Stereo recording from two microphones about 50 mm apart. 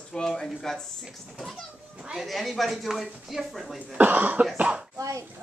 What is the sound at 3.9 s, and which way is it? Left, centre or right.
Cough, right.